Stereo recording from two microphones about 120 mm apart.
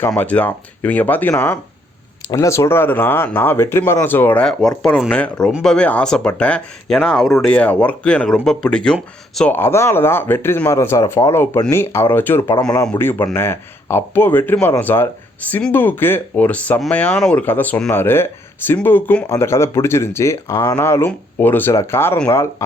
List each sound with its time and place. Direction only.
0.2 s speech: 15° left (ahead or behind)
9.5 s speech: 20° left (ahead or behind)
17.4 s speech: 15° left (ahead or behind)